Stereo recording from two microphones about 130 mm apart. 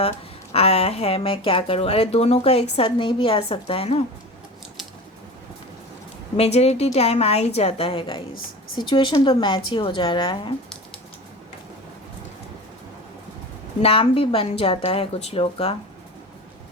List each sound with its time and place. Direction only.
0.5 s speech: 50° left (ahead or behind)
6.3 s a woman's voice: 55° left (ahead or behind)
13.8 s speech: 45° left (ahead or behind)